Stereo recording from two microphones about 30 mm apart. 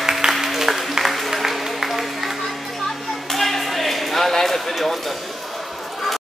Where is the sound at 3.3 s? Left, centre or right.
Centre.